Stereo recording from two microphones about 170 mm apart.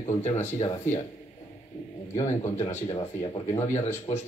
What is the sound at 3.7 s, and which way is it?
Speech, 40° left (ahead or behind).